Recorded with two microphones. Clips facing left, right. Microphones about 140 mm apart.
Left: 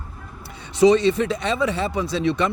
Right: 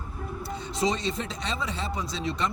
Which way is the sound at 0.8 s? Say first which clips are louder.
Left 13 dB; 65° left (ahead or behind).